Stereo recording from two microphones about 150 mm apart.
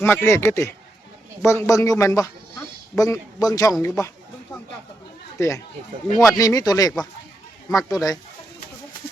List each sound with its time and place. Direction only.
0.0 s a man's voice: 15° left (ahead or behind)
5.4 s a man's voice: 20° left (ahead or behind)